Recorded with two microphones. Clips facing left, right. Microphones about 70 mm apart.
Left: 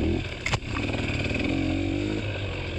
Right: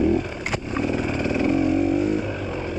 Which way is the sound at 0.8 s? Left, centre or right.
Centre.